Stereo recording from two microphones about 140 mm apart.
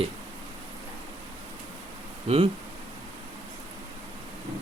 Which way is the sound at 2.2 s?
45° right (ahead or behind).